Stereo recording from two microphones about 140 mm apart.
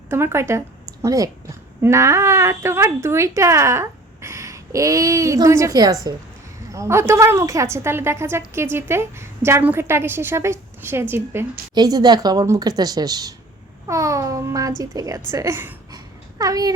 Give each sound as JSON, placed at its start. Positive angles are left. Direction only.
{"t": 0.1, "sound": "a woman's voice", "side_deg": -15}
{"t": 11.7, "sound": "speech", "side_deg": -30}